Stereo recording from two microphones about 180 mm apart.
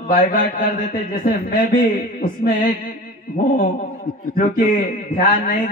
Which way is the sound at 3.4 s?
40° left (ahead or behind).